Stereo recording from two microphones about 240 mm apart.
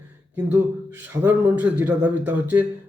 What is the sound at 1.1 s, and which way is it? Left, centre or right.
A man's voice, centre.